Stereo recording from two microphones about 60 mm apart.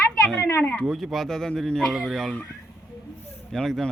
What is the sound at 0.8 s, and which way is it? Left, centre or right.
Speech, centre.